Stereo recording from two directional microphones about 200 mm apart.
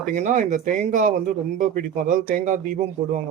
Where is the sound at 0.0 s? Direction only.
40° right (ahead or behind).